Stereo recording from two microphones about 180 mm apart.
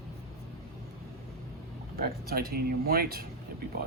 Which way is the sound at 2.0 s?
55° right (ahead or behind).